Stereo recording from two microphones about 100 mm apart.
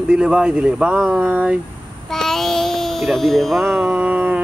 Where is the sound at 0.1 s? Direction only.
10° right (ahead or behind).